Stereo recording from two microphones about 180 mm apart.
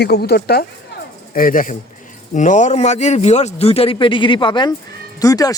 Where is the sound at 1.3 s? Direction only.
50° left (ahead or behind).